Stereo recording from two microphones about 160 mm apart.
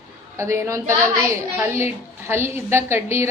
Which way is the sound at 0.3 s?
15° right (ahead or behind).